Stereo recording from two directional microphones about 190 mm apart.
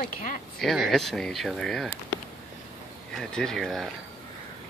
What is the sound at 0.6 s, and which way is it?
Speech, centre (ahead or behind).